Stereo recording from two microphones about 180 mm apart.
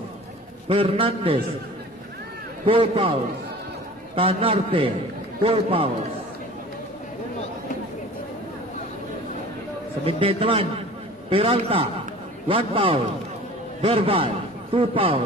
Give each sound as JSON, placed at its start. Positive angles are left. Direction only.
{"t": 0.7, "sound": "a man's voice", "side_deg": -30}
{"t": 2.6, "sound": "a man's voice", "side_deg": -30}
{"t": 4.1, "sound": "a man's voice", "side_deg": -30}
{"t": 10.0, "sound": "a man's voice", "side_deg": -30}